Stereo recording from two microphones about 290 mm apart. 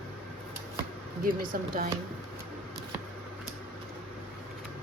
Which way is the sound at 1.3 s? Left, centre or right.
Right.